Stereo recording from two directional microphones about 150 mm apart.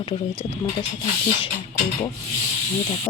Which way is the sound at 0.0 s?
40° left (ahead or behind).